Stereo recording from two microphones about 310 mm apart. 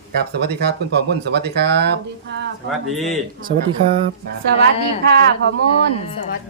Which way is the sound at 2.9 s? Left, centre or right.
Centre.